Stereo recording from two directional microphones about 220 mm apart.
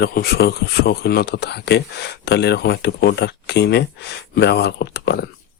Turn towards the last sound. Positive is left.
turn(degrees=45)  # may be behind; listen again after turning